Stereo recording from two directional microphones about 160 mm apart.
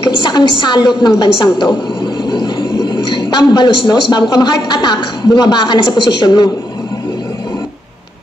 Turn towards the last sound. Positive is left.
turn(degrees=25)  # may be behind; listen again after turning